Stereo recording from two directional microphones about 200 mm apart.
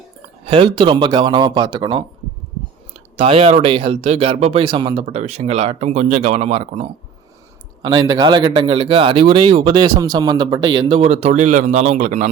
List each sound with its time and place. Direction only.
0.4 s speech: 25° right (ahead or behind)
3.2 s speech: 30° right (ahead or behind)